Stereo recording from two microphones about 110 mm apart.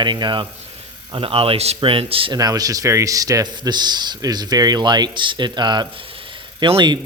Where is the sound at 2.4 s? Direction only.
35° right (ahead or behind).